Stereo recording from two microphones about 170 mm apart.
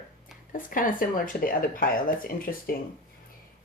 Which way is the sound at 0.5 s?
55° left (ahead or behind).